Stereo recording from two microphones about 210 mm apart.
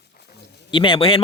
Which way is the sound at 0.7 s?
25° left (ahead or behind).